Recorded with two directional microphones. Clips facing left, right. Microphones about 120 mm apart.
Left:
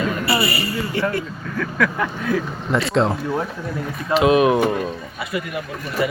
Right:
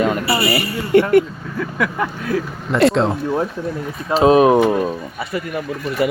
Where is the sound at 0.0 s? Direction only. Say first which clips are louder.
Right 3 dB; 65° right (ahead or behind).